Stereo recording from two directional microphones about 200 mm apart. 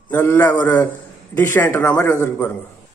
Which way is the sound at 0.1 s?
10° left (ahead or behind).